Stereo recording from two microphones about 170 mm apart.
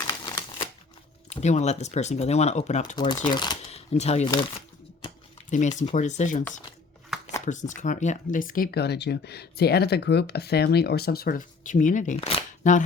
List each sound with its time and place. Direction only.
1.3 s speech: 40° left (ahead or behind)
2.9 s speech: 25° left (ahead or behind)
3.7 s speech: 40° left (ahead or behind)
5.5 s speech: 45° left (ahead or behind)
7.4 s speech: 45° left (ahead or behind)